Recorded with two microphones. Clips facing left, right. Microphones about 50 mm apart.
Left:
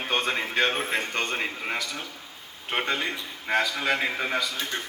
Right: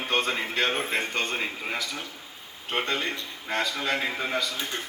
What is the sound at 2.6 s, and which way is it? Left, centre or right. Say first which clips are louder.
A man's voice: left 1 dB; left.